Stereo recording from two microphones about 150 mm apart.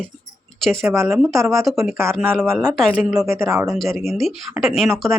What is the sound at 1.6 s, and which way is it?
Speech, centre (ahead or behind).